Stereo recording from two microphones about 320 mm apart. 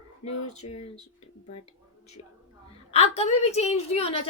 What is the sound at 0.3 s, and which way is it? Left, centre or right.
Speech, left.